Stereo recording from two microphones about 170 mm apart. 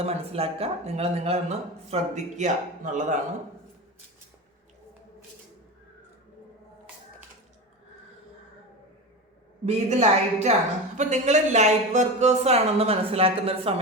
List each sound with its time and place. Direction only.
0.0 s speech: 35° right (ahead or behind)
9.6 s speech: 40° right (ahead or behind)